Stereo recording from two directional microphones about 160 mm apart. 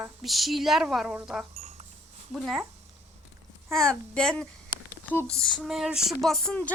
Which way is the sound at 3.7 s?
5° left (ahead or behind).